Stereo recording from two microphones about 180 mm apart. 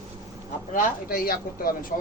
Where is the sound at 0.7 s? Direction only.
50° left (ahead or behind).